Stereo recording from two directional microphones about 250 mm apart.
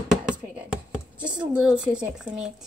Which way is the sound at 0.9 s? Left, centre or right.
Centre.